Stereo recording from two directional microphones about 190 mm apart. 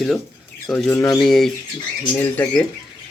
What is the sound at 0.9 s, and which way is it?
Speech, 15° left (ahead or behind).